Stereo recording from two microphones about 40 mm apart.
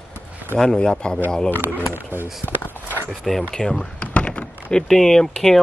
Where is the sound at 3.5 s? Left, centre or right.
Centre.